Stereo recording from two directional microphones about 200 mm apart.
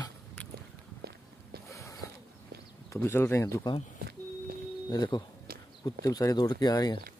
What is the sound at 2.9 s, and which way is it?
Speech, 10° left (ahead or behind).